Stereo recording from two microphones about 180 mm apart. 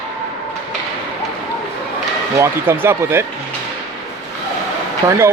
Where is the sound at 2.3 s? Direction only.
15° right (ahead or behind).